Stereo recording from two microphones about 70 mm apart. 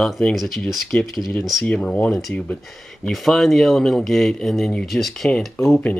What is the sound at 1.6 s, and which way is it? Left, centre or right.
Speech, centre.